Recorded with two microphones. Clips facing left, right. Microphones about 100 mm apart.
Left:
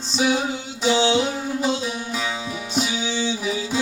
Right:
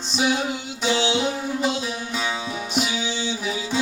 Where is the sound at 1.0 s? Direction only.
40° left (ahead or behind).